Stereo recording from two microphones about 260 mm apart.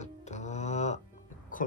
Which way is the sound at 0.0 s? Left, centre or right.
Left.